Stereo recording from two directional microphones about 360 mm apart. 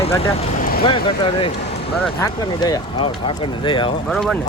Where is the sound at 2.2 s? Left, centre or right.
Centre.